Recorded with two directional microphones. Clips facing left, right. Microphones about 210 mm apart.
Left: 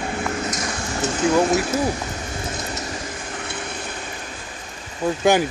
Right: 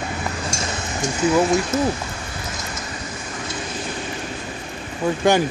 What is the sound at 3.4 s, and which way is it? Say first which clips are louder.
Vehicle: right 5 dB; 60° left (ahead or behind).